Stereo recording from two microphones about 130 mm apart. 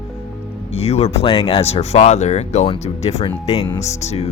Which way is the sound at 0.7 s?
50° left (ahead or behind).